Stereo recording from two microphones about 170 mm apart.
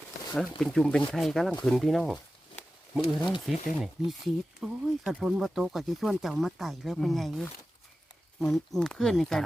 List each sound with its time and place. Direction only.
0.3 s speech: centre (ahead or behind)
2.6 s a sound: 10° left (ahead or behind)
3.2 s speech: 25° left (ahead or behind)
3.4 s speech: centre (ahead or behind)